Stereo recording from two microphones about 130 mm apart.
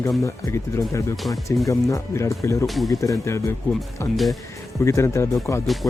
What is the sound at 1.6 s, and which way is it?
Speech, 25° left (ahead or behind).